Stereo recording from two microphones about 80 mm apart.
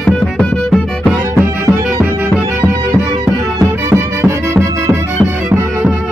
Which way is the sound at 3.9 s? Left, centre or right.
Right.